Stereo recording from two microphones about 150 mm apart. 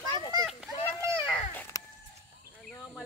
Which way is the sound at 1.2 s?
10° left (ahead or behind).